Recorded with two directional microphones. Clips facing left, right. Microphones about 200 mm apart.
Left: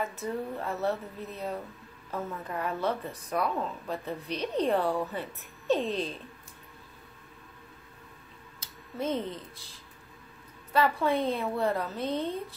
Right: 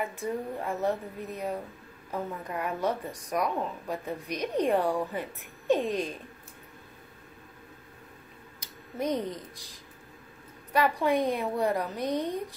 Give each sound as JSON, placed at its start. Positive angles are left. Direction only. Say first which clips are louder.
{"t": 0.0, "sound": "speech", "louder": "right 1 dB", "side_deg": -15}
{"t": 8.5, "sound": "speech", "louder": "right 1 dB", "side_deg": -15}
{"t": 10.7, "sound": "speech", "louder": "right 1 dB", "side_deg": -15}